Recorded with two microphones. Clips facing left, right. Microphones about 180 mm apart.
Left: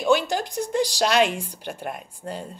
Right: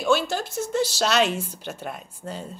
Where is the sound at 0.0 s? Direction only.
15° left (ahead or behind).